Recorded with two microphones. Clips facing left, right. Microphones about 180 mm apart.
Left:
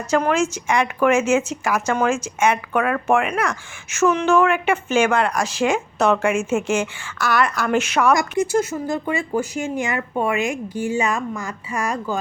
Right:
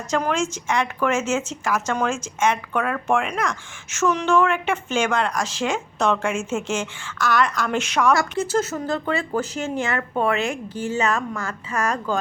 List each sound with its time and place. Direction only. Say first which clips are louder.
0.1 s a woman's voice: left 4 dB; 5° left (ahead or behind)